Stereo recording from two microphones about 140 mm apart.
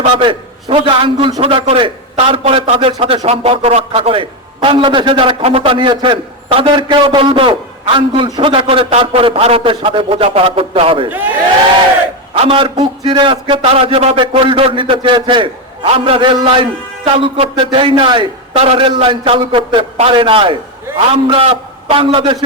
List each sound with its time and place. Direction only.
0.2 s a man's voice: 35° right (ahead or behind)
11.1 s speech: 10° right (ahead or behind)
12.3 s a man's voice: 40° right (ahead or behind)